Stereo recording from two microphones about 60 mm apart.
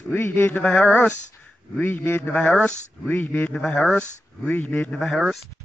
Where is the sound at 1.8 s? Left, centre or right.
Left.